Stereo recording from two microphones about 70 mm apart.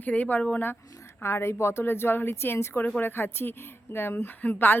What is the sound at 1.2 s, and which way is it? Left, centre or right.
A woman's voice, left.